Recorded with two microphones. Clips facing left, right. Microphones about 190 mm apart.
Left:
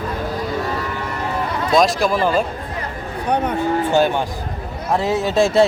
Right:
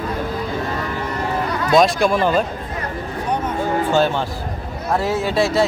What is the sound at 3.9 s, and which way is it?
Speech, 15° left (ahead or behind).